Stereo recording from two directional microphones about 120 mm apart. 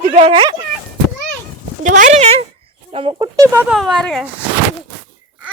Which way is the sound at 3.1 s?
30° right (ahead or behind).